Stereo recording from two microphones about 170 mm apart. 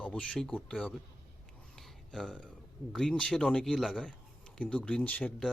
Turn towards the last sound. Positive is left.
turn(degrees=10)  # may be behind; listen again after turning